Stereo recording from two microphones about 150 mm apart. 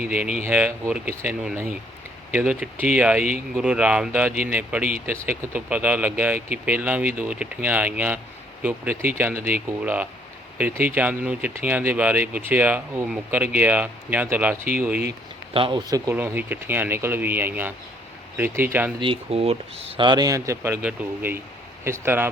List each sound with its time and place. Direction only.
0.0 s speech: 10° right (ahead or behind)
15.5 s speech: 35° right (ahead or behind)
16.1 s speech: 10° right (ahead or behind)
18.9 s speech: 35° right (ahead or behind); by 22.3 s 15° right (ahead or behind)